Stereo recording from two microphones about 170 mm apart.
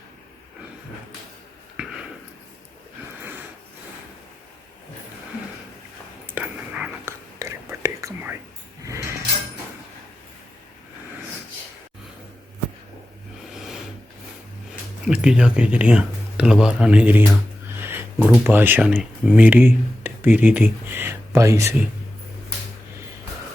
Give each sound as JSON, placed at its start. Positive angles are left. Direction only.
{"t": 1.7, "sound": "a sound", "side_deg": 0}
{"t": 6.3, "sound": "whispering", "side_deg": -5}
{"t": 8.8, "sound": "drawer open or close", "side_deg": -20}
{"t": 15.0, "sound": "speech", "side_deg": -5}
{"t": 17.7, "sound": "a sound", "side_deg": -15}
{"t": 18.3, "sound": "speech", "side_deg": -10}